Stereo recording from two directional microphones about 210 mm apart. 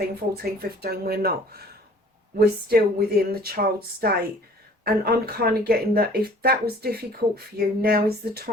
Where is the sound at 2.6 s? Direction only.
50° right (ahead or behind).